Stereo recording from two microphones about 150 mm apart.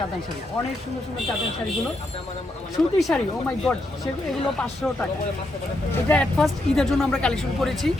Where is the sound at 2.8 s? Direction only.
5° left (ahead or behind).